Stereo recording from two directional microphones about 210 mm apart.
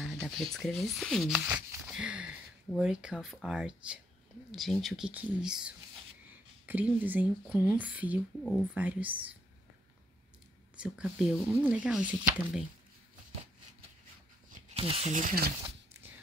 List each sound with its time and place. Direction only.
0.1 s speech: centre (ahead or behind)
10.8 s speech: 5° right (ahead or behind)
14.5 s speech: 30° right (ahead or behind)